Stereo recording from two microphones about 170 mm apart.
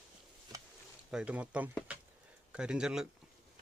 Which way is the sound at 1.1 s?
5° right (ahead or behind).